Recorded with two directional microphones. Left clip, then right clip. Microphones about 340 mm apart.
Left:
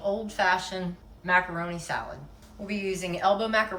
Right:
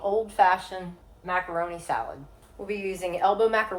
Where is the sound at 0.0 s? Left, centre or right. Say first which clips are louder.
Right 5 dB; centre.